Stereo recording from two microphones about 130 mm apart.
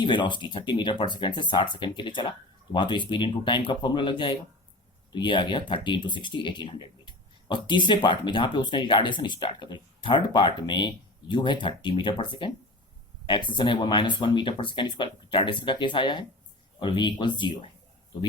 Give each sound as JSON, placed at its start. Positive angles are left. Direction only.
{"t": 0.0, "sound": "speech", "side_deg": 35}
{"t": 13.6, "sound": "speech", "side_deg": 35}